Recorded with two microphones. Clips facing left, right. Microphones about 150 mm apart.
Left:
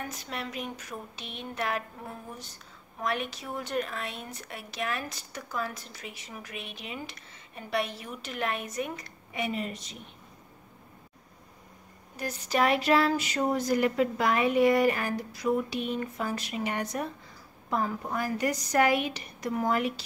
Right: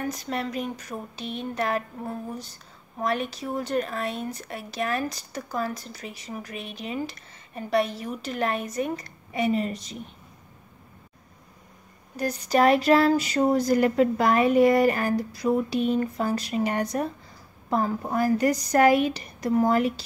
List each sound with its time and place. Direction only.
0.0 s speech: 40° right (ahead or behind)
12.2 s speech: 40° right (ahead or behind)